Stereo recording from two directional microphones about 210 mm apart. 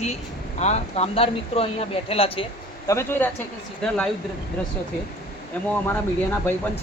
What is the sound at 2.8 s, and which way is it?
Speech, 10° left (ahead or behind).